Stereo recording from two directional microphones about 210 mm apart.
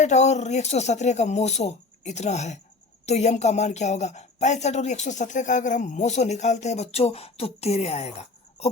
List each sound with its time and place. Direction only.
0.0 s speech: 35° left (ahead or behind)